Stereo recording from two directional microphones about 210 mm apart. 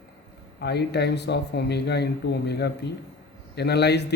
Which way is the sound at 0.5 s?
50° left (ahead or behind).